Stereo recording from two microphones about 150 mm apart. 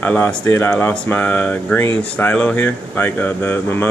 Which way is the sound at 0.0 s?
10° left (ahead or behind).